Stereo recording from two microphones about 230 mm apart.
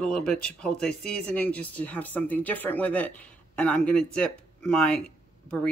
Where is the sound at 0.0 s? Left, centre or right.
Centre.